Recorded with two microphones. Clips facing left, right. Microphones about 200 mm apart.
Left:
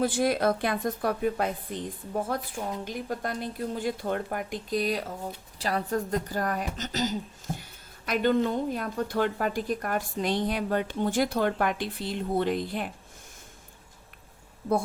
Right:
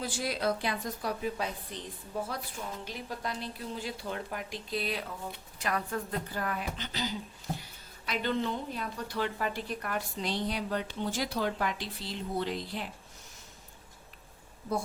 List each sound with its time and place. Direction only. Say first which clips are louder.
0.0 s a woman's voice: left 8 dB; 55° left (ahead or behind)